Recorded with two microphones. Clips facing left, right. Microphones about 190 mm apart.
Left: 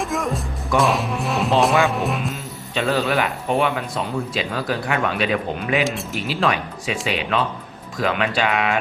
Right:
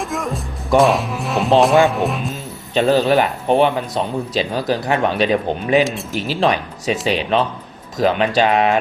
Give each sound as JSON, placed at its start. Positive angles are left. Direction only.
{"t": 0.0, "sound": "music", "side_deg": 0}
{"t": 0.8, "sound": "speech", "side_deg": 0}
{"t": 2.7, "sound": "speech", "side_deg": -35}